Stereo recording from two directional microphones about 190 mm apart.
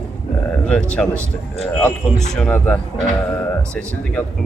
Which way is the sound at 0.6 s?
5° left (ahead or behind).